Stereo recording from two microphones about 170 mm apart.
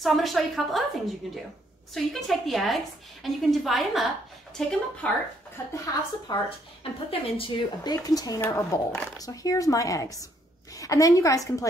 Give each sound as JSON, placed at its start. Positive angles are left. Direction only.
{"t": 0.0, "sound": "a woman's voice", "side_deg": 0}
{"t": 5.8, "sound": "a woman's voice", "side_deg": 25}